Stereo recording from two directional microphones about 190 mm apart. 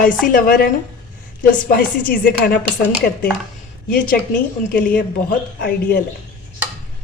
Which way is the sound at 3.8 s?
45° left (ahead or behind).